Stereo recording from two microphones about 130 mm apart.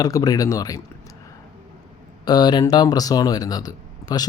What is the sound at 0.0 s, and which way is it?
Speech, 30° left (ahead or behind).